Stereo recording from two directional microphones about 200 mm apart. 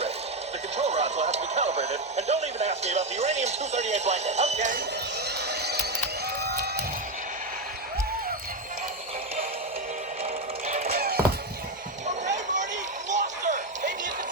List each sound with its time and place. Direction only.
0.8 s speech: 35° right (ahead or behind)
5.4 s a sound: 55° right (ahead or behind)
6.4 s music: 55° right (ahead or behind)
10.7 s music: 35° right (ahead or behind)
12.0 s a sound: 35° right (ahead or behind)
13.1 s music: 35° right (ahead or behind)